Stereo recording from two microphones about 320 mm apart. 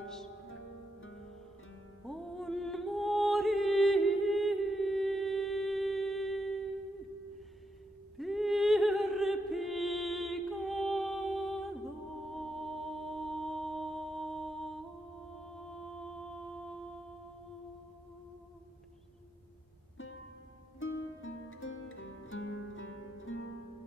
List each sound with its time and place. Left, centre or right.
0.0 s music: centre
2.0 s music: centre
8.2 s a sound: centre
15.4 s music: centre
20.8 s music: left